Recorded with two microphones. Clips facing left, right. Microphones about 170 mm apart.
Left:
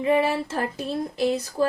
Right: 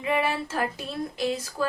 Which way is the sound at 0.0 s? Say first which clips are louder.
Left 5 dB; 35° left (ahead or behind).